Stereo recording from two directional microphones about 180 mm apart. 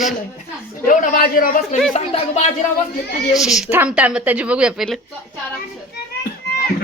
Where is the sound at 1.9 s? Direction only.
40° left (ahead or behind).